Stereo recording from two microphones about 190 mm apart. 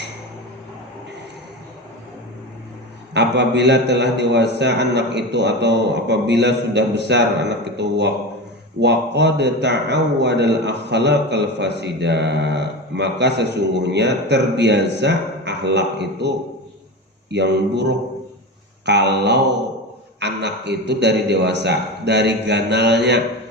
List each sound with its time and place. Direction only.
3.2 s a man's voice: 65° right (ahead or behind)